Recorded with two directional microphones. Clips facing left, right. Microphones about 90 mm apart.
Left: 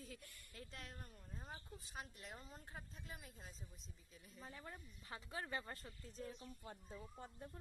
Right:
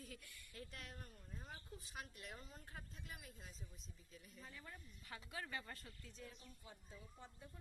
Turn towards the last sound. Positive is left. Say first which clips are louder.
# left 5 dB
turn(degrees=50)  # may be behind; listen again after turning